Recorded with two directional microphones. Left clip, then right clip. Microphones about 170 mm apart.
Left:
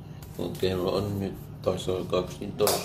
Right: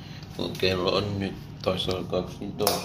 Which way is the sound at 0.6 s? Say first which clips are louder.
Right 3 dB; 5° left (ahead or behind).